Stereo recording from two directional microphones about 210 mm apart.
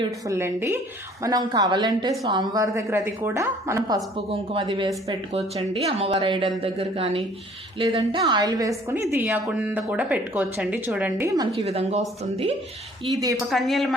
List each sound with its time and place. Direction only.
0.0 s a woman's voice: 15° right (ahead or behind)
9.0 s a woman's voice: 10° right (ahead or behind)
11.5 s speech: 30° right (ahead or behind)
13.5 s a woman's voice: centre (ahead or behind)